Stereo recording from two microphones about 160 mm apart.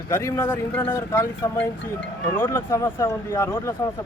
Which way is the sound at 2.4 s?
15° left (ahead or behind).